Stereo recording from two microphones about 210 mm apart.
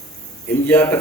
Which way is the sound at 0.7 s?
10° left (ahead or behind).